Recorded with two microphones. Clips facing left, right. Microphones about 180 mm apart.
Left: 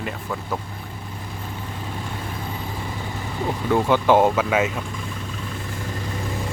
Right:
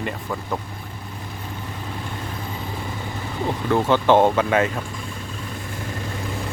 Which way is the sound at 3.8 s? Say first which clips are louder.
Right 1 dB; 10° left (ahead or behind).